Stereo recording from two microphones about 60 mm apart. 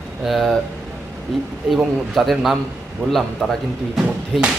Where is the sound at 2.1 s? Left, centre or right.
Centre.